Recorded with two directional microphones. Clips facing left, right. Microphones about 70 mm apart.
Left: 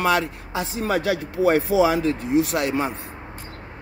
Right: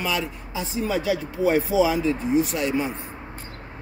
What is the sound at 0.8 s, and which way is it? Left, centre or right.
Speech, left.